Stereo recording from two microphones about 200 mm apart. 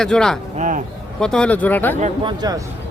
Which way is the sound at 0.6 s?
40° right (ahead or behind).